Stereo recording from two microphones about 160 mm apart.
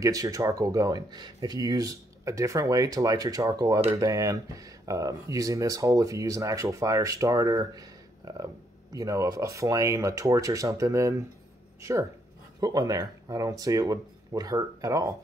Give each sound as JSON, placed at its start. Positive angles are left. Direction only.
{"t": 0.0, "sound": "speech", "side_deg": -20}